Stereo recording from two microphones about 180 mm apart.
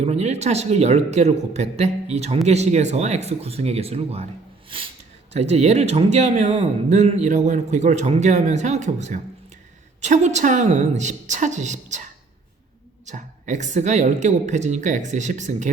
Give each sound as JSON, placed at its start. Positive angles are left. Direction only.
{"t": 0.0, "sound": "speech", "side_deg": -35}
{"t": 5.3, "sound": "speech", "side_deg": -35}
{"t": 13.1, "sound": "speech", "side_deg": -45}